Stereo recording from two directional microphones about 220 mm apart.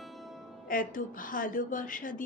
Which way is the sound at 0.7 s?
40° left (ahead or behind).